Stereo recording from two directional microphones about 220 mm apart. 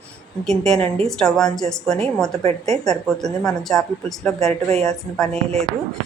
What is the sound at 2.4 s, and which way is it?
Speech, 30° right (ahead or behind).